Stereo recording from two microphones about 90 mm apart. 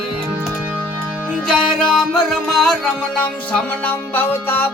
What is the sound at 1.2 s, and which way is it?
Music, 10° left (ahead or behind).